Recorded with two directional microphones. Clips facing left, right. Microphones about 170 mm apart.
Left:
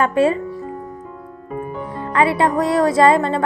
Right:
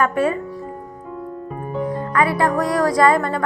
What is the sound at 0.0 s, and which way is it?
Speech, 25° left (ahead or behind).